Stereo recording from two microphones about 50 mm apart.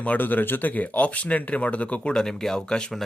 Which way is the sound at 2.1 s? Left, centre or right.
Centre.